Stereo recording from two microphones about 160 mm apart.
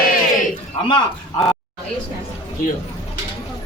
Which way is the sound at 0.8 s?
30° left (ahead or behind).